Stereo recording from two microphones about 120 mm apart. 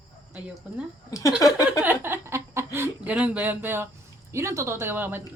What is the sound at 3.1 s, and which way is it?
Speech, 10° right (ahead or behind).